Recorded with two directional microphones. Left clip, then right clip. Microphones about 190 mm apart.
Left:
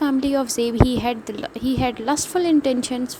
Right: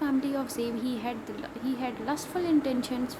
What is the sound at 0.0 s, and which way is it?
A woman's voice, 45° left (ahead or behind).